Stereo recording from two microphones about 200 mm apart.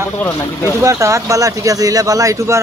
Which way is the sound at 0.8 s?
15° right (ahead or behind).